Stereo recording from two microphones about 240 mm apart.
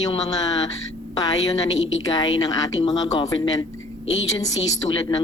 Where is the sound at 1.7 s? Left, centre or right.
Left.